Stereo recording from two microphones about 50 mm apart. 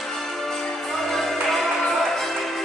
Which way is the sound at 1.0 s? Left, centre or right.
Centre.